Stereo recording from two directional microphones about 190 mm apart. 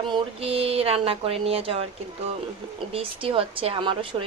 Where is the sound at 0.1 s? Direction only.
30° right (ahead or behind).